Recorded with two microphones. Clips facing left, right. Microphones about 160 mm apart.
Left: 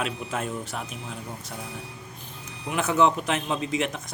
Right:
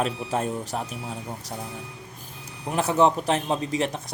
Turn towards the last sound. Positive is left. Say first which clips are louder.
# right 2 dB
turn(degrees=-35)  # may be behind; listen again after turning